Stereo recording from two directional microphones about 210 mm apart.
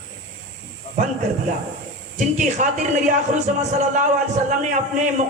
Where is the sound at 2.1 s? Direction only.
35° right (ahead or behind).